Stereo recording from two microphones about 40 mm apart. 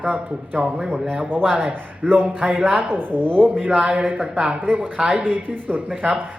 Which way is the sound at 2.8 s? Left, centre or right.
Right.